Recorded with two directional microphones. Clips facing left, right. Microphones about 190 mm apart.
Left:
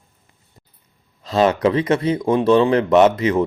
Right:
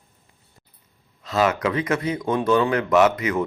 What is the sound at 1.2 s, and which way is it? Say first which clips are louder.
A man's voice: left 5 dB; 30° left (ahead or behind).